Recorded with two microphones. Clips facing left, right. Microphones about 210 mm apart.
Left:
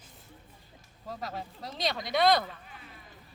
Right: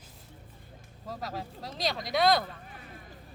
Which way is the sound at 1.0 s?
Centre (ahead or behind).